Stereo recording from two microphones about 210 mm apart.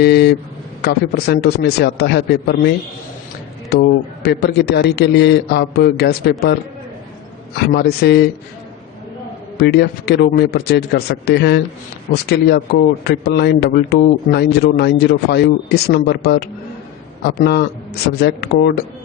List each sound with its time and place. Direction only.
0.0 s a man's voice: 50° left (ahead or behind)
9.6 s a man's voice: 50° left (ahead or behind)